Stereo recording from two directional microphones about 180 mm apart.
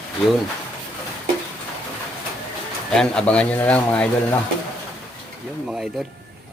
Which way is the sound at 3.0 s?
5° left (ahead or behind).